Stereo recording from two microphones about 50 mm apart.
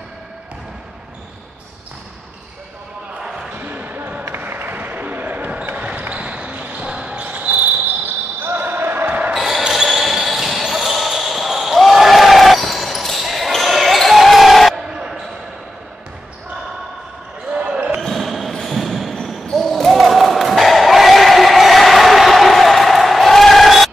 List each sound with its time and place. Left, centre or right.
3.2 s basketball bounce: centre
3.5 s a sound: right
5.8 s basketball bounce: right
9.3 s basketball bounce: centre
17.6 s basketball bounce: right
18.0 s a sound: centre